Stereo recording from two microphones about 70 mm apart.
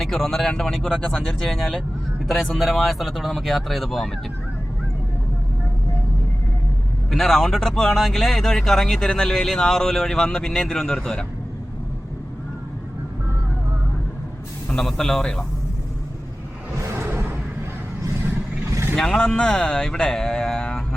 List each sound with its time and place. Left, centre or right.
0.0 s speech: centre
7.1 s speech: centre
14.8 s speech: centre
16.7 s music: right
18.7 s vehicle: right
18.9 s speech: centre